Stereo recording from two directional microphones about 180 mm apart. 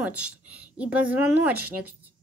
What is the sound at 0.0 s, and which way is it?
A woman's voice, 5° right (ahead or behind).